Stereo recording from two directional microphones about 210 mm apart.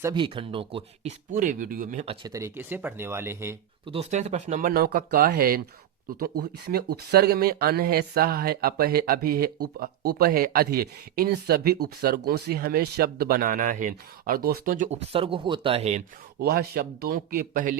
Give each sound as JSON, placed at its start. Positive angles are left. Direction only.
{"t": 0.0, "sound": "speech", "side_deg": -20}
{"t": 1.3, "sound": "speech", "side_deg": -40}
{"t": 2.2, "sound": "speech", "side_deg": -15}
{"t": 3.8, "sound": "speech", "side_deg": -30}
{"t": 4.7, "sound": "speech", "side_deg": -45}
{"t": 6.9, "sound": "speech", "side_deg": -50}
{"t": 16.4, "sound": "speech", "side_deg": -50}